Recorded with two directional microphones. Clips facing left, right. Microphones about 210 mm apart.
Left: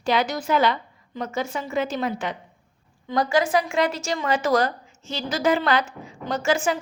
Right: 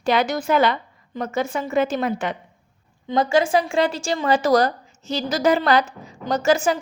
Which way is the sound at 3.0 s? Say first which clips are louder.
Right 3 dB; 25° right (ahead or behind).